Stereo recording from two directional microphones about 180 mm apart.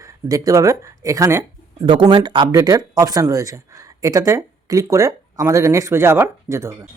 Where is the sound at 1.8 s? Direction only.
25° right (ahead or behind).